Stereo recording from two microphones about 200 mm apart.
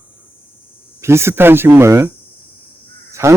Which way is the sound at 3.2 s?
15° right (ahead or behind).